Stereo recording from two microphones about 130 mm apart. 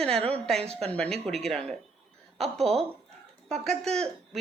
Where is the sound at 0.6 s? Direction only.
50° right (ahead or behind).